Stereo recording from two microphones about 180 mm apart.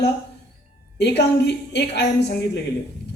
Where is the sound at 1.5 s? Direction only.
70° left (ahead or behind).